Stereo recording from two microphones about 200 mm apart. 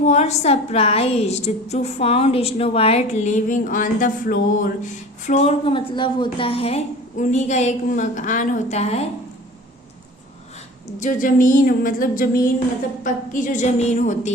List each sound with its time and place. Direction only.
0.0 s a woman's voice: 35° left (ahead or behind)
11.0 s a sound: 40° left (ahead or behind)
13.1 s a woman's voice: 40° left (ahead or behind)